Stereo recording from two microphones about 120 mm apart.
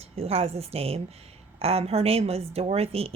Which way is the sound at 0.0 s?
55° right (ahead or behind).